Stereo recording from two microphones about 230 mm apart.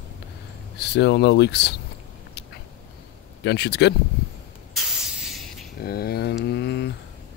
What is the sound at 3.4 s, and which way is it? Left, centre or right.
Speech, left.